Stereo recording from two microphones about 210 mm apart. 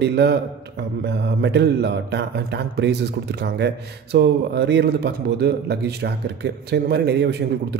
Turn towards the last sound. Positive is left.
turn(degrees=-55)  # may be behind; listen again after turning